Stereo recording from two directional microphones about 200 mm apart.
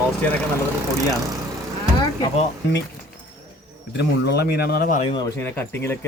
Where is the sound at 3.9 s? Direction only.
55° left (ahead or behind).